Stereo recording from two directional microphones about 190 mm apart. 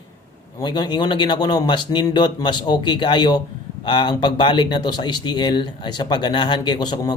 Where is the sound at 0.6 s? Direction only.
25° left (ahead or behind).